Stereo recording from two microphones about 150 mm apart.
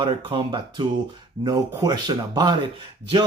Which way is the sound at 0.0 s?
30° right (ahead or behind).